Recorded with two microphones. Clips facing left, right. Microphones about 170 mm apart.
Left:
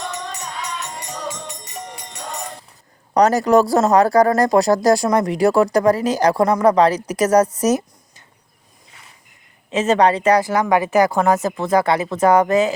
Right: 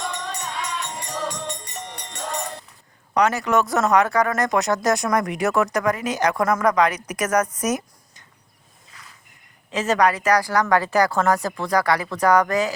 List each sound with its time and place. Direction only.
1.3 s music: 5° left (ahead or behind)
3.2 s speech: 35° left (ahead or behind)
8.9 s a sound: 30° left (ahead or behind)
9.6 s speech: 25° left (ahead or behind)